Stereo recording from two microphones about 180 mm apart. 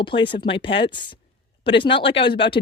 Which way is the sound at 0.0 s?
30° left (ahead or behind).